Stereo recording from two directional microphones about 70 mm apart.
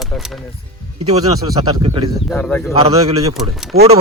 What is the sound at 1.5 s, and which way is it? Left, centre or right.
Speech, right.